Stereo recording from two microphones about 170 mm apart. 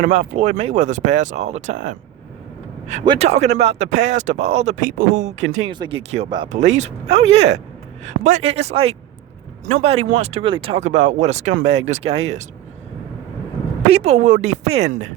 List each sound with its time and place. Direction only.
0.0 s speech: 45° right (ahead or behind)
3.0 s speech: 30° right (ahead or behind); by 5.3 s 50° right (ahead or behind)
5.8 s speech: 35° right (ahead or behind)
13.8 s speech: 40° right (ahead or behind)